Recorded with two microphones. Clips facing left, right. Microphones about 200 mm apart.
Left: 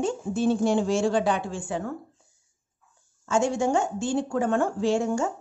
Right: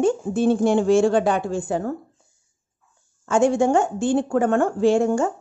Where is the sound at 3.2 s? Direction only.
55° right (ahead or behind).